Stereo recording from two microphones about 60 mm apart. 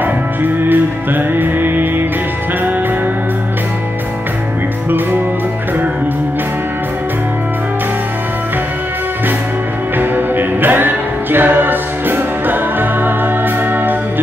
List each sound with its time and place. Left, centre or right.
0.0 s music: right
9.9 s music: right